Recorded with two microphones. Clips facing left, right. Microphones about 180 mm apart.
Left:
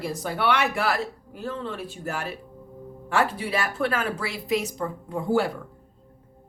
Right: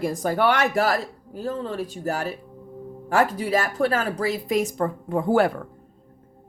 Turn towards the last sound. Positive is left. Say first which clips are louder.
# right 4 dB
turn(degrees=-55)  # may be behind; listen again after turning